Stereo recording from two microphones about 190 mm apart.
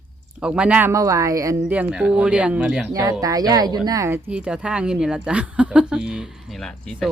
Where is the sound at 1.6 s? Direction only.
5° right (ahead or behind).